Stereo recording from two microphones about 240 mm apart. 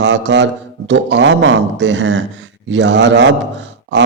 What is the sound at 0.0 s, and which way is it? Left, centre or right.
A man's voice, right.